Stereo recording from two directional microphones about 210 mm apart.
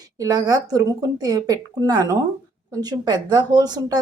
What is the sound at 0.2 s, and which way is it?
Speech, 15° right (ahead or behind).